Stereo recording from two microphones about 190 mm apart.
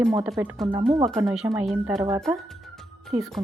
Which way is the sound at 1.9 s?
15° right (ahead or behind).